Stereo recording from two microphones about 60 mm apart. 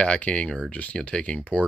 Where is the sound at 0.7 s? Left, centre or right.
Left.